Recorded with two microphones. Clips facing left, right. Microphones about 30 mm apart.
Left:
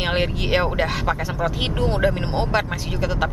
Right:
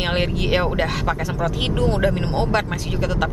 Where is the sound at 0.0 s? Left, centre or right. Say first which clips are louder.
Right 1 dB; centre.